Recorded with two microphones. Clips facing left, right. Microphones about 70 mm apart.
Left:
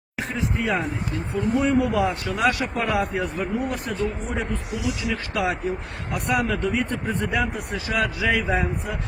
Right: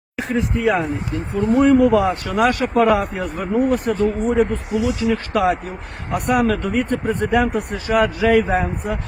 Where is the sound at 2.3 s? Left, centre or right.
Right.